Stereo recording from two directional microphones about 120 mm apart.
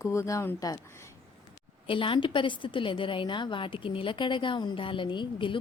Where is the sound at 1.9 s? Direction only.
45° left (ahead or behind).